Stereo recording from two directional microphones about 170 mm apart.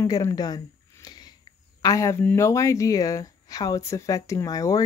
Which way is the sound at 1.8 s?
20° left (ahead or behind).